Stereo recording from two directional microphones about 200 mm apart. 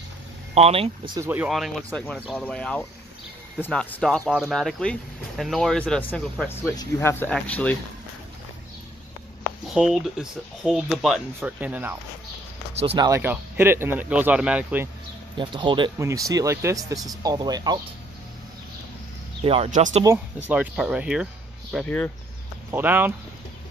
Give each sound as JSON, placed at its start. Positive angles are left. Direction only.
{"t": 0.6, "sound": "speech", "side_deg": -30}
{"t": 1.1, "sound": "speech", "side_deg": -10}
{"t": 9.8, "sound": "speech", "side_deg": -5}
{"t": 12.7, "sound": "speech", "side_deg": -25}
{"t": 13.1, "sound": "speech", "side_deg": -10}
{"t": 15.3, "sound": "speech", "side_deg": -25}
{"t": 19.4, "sound": "speech", "side_deg": -30}
{"t": 20.4, "sound": "speech", "side_deg": -5}
{"t": 21.7, "sound": "speech", "side_deg": 5}
{"t": 22.7, "sound": "speech", "side_deg": -10}